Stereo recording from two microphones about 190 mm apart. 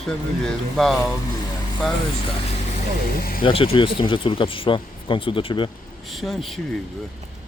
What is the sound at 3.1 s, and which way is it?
Speech, 50° left (ahead or behind).